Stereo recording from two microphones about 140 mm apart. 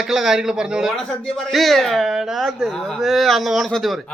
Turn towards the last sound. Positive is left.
turn(degrees=0)  # may be behind; listen again after turning